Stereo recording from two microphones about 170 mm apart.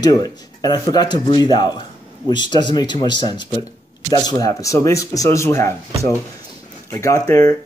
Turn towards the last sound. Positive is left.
turn(degrees=20)  # may be behind; listen again after turning